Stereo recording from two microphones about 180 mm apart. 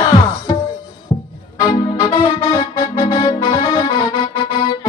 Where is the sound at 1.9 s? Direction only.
30° left (ahead or behind).